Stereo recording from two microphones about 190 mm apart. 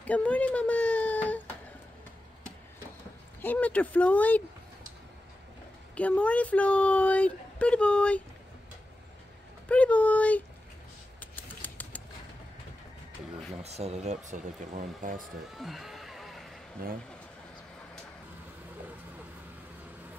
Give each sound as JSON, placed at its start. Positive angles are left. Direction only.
{"t": 0.0, "sound": "speech", "side_deg": 5}
{"t": 3.3, "sound": "speech", "side_deg": 10}
{"t": 5.9, "sound": "speech", "side_deg": 5}
{"t": 9.7, "sound": "speech", "side_deg": 5}
{"t": 11.1, "sound": "a sound", "side_deg": 10}
{"t": 13.6, "sound": "speech", "side_deg": -35}
{"t": 15.5, "sound": "a sound", "side_deg": 0}